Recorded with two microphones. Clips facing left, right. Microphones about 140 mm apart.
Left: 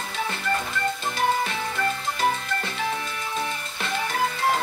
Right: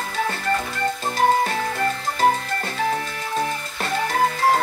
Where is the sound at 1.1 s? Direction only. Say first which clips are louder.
Right 7 dB; 40° right (ahead or behind).